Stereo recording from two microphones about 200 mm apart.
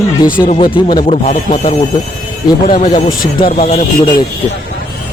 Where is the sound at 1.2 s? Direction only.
40° left (ahead or behind).